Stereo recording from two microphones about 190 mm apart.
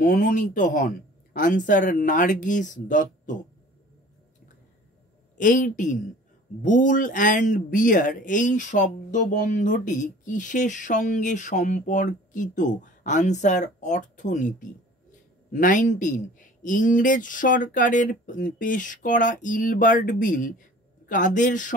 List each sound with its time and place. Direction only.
0.0 s speech: 45° left (ahead or behind)
5.4 s speech: 45° left (ahead or behind)